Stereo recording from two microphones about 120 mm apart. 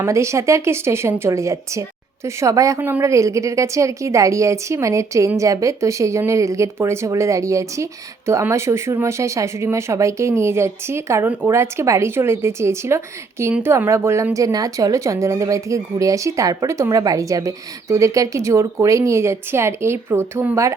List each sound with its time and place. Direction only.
0.0 s speech: 25° right (ahead or behind)